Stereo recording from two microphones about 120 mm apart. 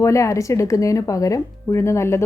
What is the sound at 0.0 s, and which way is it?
Speech, 25° left (ahead or behind).